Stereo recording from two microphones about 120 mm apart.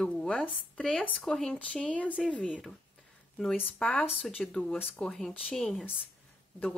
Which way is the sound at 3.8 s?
5° left (ahead or behind).